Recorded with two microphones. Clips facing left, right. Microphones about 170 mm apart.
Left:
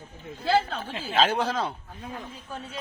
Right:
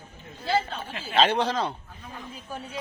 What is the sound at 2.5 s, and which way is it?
Speech, 15° right (ahead or behind).